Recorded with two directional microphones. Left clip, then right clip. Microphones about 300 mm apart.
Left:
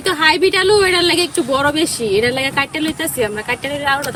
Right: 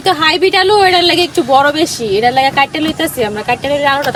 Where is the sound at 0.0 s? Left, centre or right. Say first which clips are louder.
Right 3 dB; centre.